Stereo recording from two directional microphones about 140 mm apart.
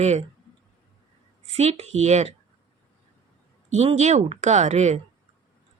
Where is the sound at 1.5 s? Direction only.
50° right (ahead or behind).